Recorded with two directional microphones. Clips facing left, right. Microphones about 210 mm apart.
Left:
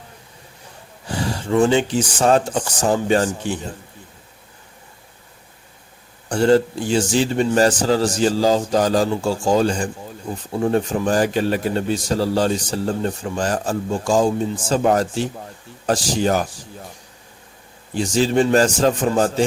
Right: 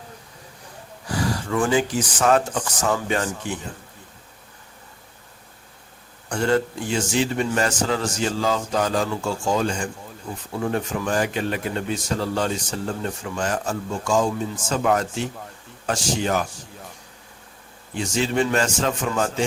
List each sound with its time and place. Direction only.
1.0 s speech: 25° left (ahead or behind)
6.2 s a man's voice: 30° left (ahead or behind)
17.9 s a man's voice: 35° left (ahead or behind)